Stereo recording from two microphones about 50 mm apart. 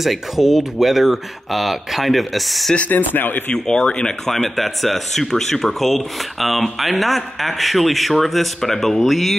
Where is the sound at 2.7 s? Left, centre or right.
Left.